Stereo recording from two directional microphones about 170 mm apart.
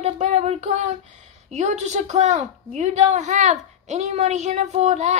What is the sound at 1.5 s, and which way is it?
A woman's voice, 45° right (ahead or behind).